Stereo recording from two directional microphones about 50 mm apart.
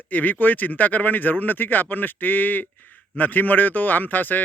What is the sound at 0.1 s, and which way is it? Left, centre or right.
Speech, left.